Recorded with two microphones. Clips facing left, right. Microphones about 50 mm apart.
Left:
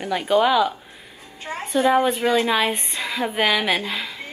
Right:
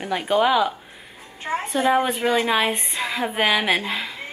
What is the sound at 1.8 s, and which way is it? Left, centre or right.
Speech, centre.